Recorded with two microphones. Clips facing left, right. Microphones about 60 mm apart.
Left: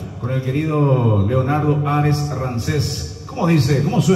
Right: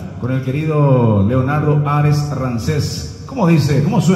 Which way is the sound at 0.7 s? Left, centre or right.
Right.